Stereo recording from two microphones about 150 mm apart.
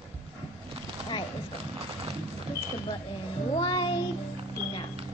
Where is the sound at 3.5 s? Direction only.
30° left (ahead or behind).